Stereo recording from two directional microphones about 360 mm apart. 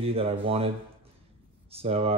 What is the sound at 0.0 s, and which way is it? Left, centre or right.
Speech, centre.